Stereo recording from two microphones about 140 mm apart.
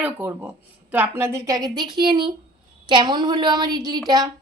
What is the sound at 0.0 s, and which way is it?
A woman's voice, 15° right (ahead or behind).